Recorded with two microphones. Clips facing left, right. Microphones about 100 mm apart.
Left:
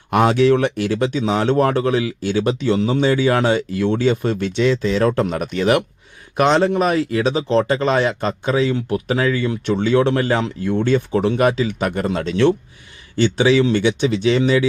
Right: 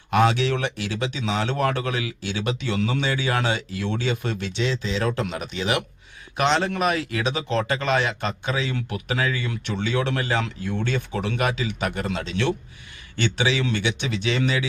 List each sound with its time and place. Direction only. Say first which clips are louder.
0.1 s speech: left 6 dB; 45° left (ahead or behind)